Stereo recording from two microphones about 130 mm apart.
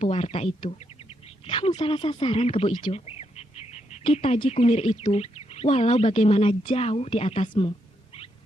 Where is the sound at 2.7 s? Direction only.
35° left (ahead or behind).